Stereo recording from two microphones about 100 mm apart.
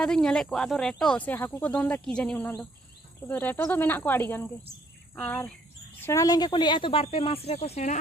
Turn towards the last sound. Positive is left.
turn(degrees=85)